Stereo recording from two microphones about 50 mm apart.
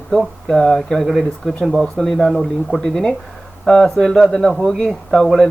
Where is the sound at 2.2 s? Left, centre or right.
Centre.